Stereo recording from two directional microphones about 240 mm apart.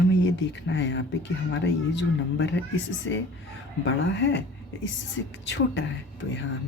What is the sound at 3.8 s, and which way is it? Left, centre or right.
A woman's voice, left.